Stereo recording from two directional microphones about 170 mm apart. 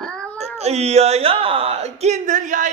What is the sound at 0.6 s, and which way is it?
A man's voice, 40° right (ahead or behind).